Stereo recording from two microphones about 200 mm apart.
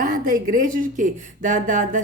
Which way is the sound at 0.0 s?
45° right (ahead or behind).